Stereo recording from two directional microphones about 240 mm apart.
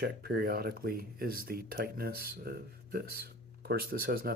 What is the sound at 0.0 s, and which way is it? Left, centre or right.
Speech, right.